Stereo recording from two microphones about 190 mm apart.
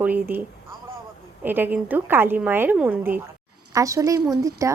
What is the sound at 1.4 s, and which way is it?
A woman's voice, 10° right (ahead or behind).